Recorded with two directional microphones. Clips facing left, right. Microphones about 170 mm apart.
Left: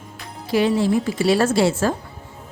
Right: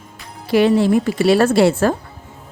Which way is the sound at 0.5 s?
65° right (ahead or behind).